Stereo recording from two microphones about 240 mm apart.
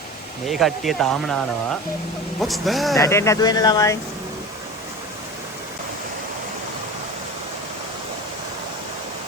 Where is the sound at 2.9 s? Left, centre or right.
Centre.